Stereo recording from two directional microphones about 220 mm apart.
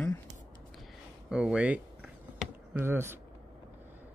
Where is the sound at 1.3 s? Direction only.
5° right (ahead or behind).